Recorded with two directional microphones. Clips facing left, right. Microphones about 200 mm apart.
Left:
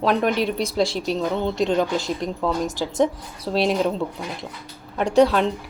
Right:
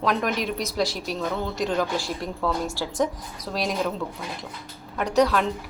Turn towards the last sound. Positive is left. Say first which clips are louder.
# left 4 dB
turn(degrees=30)  # may be behind; listen again after turning